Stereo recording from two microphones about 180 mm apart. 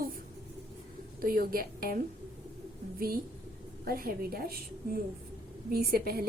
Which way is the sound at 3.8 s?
55° right (ahead or behind).